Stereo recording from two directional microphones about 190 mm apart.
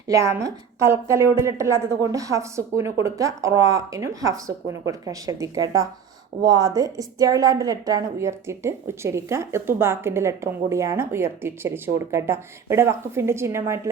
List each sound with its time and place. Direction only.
0.1 s a woman's voice: 15° right (ahead or behind)